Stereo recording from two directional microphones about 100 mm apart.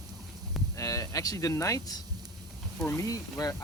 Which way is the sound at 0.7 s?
35° left (ahead or behind).